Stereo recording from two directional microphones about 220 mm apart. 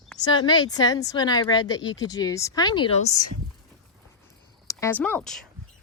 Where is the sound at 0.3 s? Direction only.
20° left (ahead or behind).